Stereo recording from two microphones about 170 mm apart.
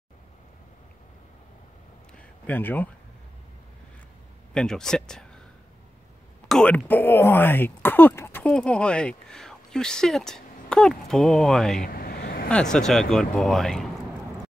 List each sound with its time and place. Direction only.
2.1 s a sound: 10° left (ahead or behind)
4.6 s speech: 5° left (ahead or behind)
6.5 s speech: 5° left (ahead or behind)
11.8 s vehicle: 60° left (ahead or behind)
12.7 s speech: 5° left (ahead or behind)